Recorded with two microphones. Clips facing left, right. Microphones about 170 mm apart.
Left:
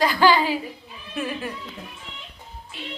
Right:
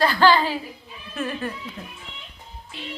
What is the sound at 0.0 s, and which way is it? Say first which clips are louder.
A woman's voice: even; 10° left (ahead or behind).